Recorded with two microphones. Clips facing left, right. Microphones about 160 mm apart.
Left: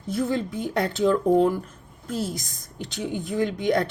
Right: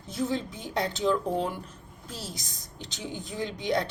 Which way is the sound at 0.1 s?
55° left (ahead or behind).